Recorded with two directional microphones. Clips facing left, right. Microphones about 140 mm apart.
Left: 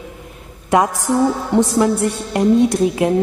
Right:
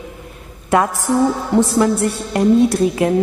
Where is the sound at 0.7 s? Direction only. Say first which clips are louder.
Left 1 dB; 15° left (ahead or behind).